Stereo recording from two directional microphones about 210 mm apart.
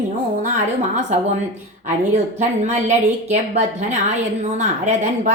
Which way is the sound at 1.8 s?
35° right (ahead or behind).